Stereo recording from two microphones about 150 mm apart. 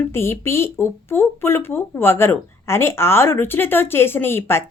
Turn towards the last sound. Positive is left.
turn(degrees=15)  # may be behind; listen again after turning